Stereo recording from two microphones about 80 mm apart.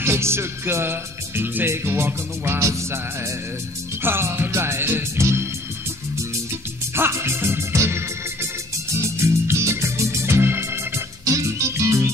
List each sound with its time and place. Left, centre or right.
0.0 s music: right
4.0 s music: right
7.0 s music: right
9.2 s organ: right
11.2 s music: right